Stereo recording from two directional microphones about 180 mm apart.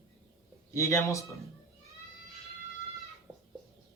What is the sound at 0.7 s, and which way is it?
Speech, 15° left (ahead or behind).